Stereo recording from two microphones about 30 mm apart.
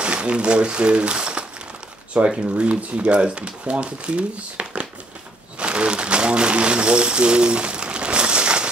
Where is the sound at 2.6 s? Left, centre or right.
Right.